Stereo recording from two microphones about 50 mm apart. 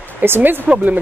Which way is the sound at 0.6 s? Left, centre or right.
Right.